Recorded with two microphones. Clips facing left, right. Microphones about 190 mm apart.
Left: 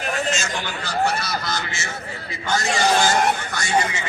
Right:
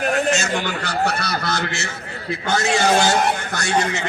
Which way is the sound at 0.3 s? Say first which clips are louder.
Right 5 dB; 60° right (ahead or behind).